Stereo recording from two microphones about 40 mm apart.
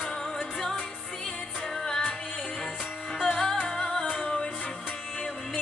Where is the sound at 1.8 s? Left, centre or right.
Centre.